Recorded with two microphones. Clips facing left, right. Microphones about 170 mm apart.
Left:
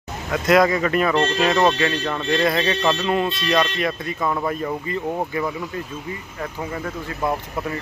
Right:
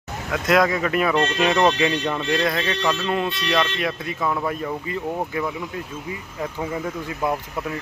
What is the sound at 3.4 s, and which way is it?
Speech, centre (ahead or behind).